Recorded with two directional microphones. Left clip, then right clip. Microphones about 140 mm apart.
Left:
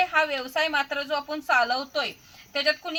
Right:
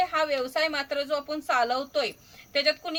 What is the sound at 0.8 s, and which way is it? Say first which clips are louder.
A woman's voice: left 2 dB; 15° right (ahead or behind).